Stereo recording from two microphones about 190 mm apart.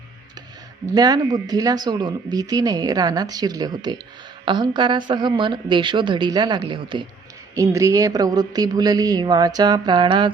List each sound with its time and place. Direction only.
0.9 s speech: 20° right (ahead or behind)